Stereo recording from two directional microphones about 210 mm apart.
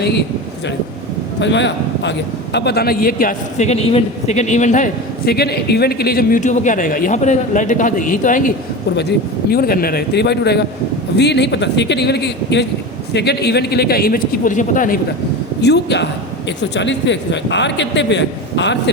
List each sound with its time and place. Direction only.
1.4 s a man's voice: 60° left (ahead or behind); by 8.5 s 40° left (ahead or behind)
9.0 s speech: 50° left (ahead or behind)
15.6 s a man's voice: 55° left (ahead or behind)